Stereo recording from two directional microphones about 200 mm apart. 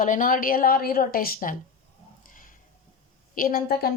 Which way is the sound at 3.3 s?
45° left (ahead or behind).